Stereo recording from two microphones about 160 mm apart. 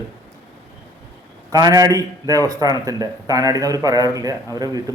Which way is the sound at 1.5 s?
25° right (ahead or behind).